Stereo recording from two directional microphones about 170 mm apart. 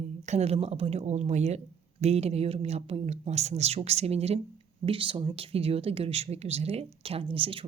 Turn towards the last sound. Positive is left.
turn(degrees=-30)  # may be behind; listen again after turning